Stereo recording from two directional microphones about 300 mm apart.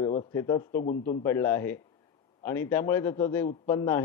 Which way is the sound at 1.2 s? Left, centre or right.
Centre.